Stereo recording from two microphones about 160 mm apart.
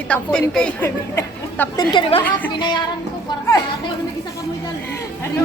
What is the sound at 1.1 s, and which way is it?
A woman's voice, 20° left (ahead or behind).